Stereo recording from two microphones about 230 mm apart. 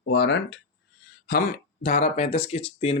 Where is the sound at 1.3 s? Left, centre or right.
Left.